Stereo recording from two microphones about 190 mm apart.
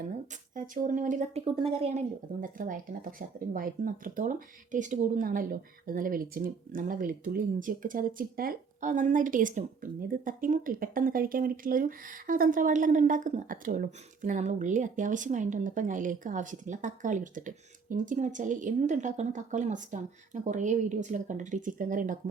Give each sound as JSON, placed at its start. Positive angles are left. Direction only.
{"t": 0.5, "sound": "a woman's voice", "side_deg": -45}
{"t": 2.4, "sound": "speech", "side_deg": -45}